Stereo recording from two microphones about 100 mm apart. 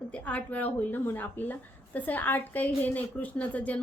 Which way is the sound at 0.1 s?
15° left (ahead or behind).